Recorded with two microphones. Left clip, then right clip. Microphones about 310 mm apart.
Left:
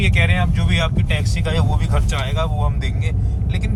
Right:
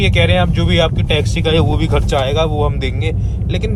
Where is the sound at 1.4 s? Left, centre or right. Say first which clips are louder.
Right 9 dB; right.